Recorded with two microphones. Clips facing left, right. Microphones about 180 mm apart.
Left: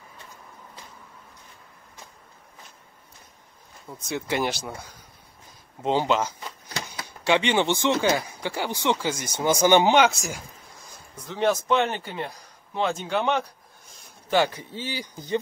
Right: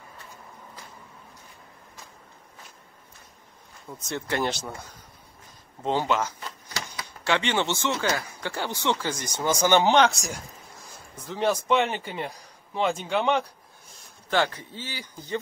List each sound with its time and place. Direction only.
4.0 s speech: 5° left (ahead or behind)
5.8 s speech: 20° left (ahead or behind); by 13.5 s centre (ahead or behind)
14.3 s speech: 10° left (ahead or behind)